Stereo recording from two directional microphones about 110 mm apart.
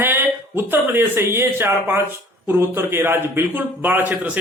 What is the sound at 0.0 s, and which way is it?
Speech, 20° right (ahead or behind).